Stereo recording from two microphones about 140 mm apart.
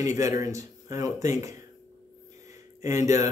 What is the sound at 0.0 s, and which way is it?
Speech, 20° right (ahead or behind).